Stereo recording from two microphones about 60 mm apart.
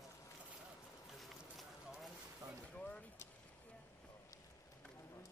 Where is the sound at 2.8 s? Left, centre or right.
Left.